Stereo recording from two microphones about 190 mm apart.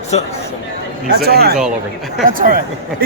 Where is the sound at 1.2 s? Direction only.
55° right (ahead or behind).